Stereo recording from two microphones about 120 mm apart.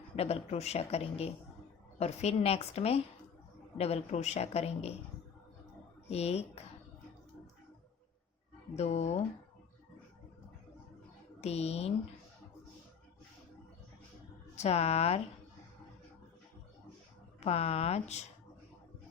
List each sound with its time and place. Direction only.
0.2 s speech: 60° left (ahead or behind)
6.1 s speech: 60° left (ahead or behind)
8.7 s speech: 65° left (ahead or behind)
11.3 s speech: 60° left (ahead or behind)
14.5 s speech: 65° left (ahead or behind)
17.4 s speech: 60° left (ahead or behind)